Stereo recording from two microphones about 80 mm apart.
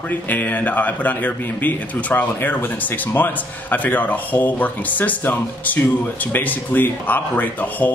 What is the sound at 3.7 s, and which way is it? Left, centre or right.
A man's voice, left.